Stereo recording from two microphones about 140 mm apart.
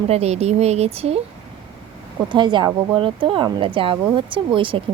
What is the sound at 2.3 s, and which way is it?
A woman's voice, 35° right (ahead or behind).